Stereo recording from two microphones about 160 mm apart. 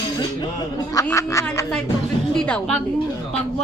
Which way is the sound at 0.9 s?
20° left (ahead or behind).